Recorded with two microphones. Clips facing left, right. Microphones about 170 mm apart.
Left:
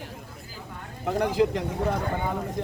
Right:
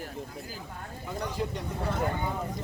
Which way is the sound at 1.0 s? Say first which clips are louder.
Left 10 dB; 80° left.